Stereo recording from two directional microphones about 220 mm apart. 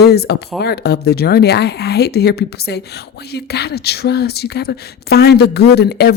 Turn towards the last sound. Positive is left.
turn(degrees=50)  # may be behind; listen again after turning